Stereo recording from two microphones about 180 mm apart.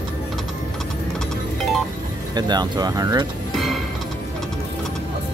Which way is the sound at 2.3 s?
25° right (ahead or behind).